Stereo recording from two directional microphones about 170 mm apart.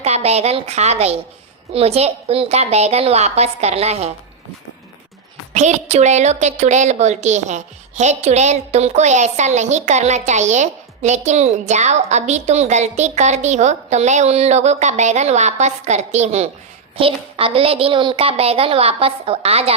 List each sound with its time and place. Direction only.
0.0 s a woman's voice: 40° right (ahead or behind)
5.5 s a woman's voice: 40° right (ahead or behind)